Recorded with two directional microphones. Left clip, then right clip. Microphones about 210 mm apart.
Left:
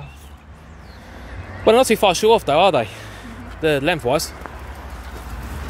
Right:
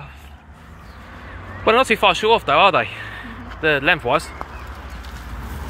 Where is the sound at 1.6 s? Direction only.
40° left (ahead or behind).